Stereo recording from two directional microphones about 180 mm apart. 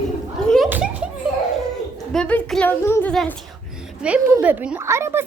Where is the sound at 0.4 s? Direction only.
5° left (ahead or behind).